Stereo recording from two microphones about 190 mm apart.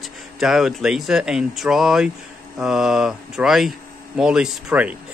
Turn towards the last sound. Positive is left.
turn(degrees=-5)  # may be behind; listen again after turning